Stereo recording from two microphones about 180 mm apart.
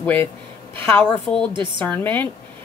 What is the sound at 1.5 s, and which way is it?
Speech, 25° right (ahead or behind).